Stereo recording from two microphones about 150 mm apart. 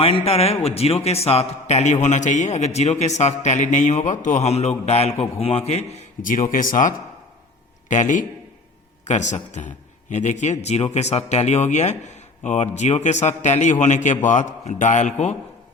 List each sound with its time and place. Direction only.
0.0 s a man's voice: 40° left (ahead or behind)
6.2 s a man's voice: 65° left (ahead or behind)